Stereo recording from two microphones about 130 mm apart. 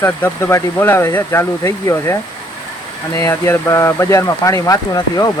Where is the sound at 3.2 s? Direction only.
20° left (ahead or behind).